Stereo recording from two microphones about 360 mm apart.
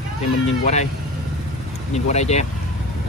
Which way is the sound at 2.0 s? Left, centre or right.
Centre.